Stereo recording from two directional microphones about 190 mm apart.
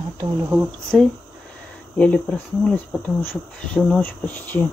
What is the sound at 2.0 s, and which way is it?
Speech, 5° left (ahead or behind).